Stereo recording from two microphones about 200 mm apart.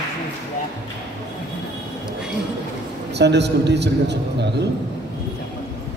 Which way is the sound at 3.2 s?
60° right (ahead or behind).